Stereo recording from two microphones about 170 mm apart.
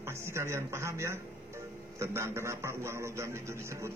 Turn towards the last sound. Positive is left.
turn(degrees=-15)  # may be behind; listen again after turning